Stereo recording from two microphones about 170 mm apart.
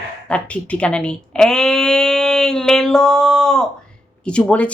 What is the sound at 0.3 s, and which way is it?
Speech, 5° left (ahead or behind).